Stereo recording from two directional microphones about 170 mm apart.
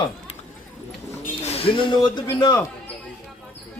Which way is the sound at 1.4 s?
35° left (ahead or behind).